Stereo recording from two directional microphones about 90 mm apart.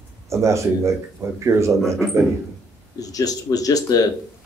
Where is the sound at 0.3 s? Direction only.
35° right (ahead or behind).